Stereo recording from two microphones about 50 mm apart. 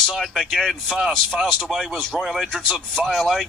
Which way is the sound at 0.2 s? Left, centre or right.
Centre.